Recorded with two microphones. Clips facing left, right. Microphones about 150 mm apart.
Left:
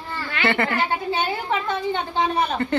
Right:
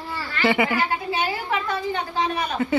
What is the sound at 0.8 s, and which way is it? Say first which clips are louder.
A woman's voice: left 1 dB; 30° left (ahead or behind).